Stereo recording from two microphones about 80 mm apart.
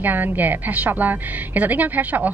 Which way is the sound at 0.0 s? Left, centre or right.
Right.